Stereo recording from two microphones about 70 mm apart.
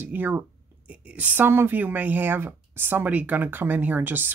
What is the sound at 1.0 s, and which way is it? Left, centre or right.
A woman's voice, right.